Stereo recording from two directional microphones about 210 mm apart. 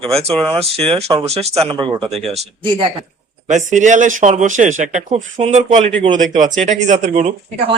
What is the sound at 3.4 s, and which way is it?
A man's voice, 35° right (ahead or behind).